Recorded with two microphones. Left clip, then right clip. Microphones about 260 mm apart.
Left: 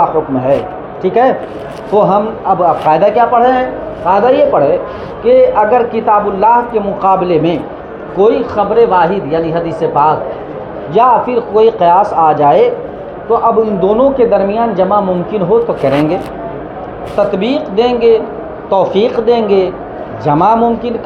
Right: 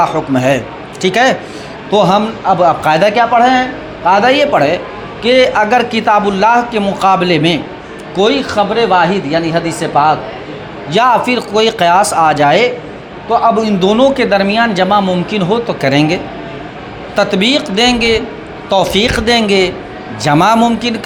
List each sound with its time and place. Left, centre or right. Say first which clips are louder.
0.0 s a man's voice: even; right
17.2 s a man's voice: right 1 dB; right